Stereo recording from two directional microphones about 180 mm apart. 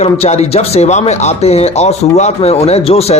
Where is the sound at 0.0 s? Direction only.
35° left (ahead or behind).